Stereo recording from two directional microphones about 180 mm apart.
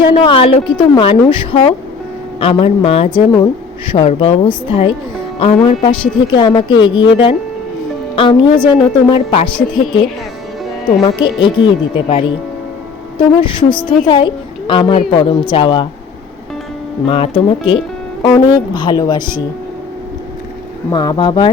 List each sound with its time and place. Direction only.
0.1 s speech: 30° left (ahead or behind)
11.2 s a child's voice: 25° left (ahead or behind)
17.1 s speech: 30° left (ahead or behind)
20.9 s speech: 25° left (ahead or behind)